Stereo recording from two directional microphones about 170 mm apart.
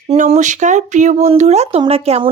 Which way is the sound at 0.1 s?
45° right (ahead or behind).